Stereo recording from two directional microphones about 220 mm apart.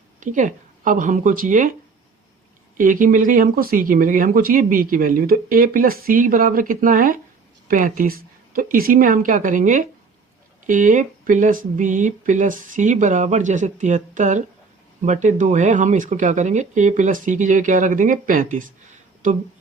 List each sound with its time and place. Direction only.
0.2 s speech: 35° right (ahead or behind)
2.7 s speech: 35° right (ahead or behind)